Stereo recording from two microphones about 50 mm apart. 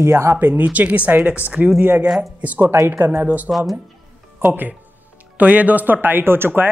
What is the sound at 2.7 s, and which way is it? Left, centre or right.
Speech, right.